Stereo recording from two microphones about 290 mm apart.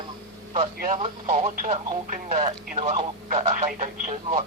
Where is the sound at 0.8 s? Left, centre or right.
Right.